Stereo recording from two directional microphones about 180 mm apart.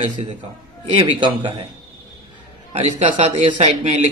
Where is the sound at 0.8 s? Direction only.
30° right (ahead or behind).